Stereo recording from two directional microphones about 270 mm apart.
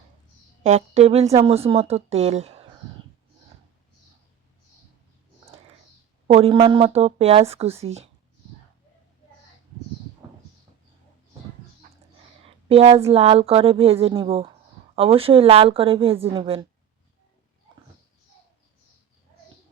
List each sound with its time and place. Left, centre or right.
0.6 s a woman's voice: right
6.2 s a woman's voice: right
11.8 s a sound: right
12.6 s a woman's voice: right